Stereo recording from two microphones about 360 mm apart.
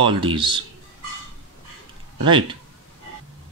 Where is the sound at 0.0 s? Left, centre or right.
Centre.